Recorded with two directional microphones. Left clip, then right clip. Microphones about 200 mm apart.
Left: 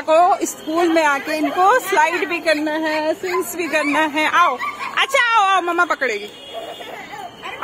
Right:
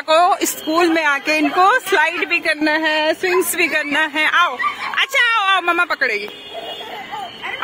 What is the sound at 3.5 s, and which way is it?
Speech, centre (ahead or behind).